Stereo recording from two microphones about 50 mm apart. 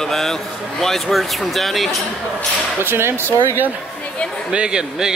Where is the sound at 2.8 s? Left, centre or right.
Right.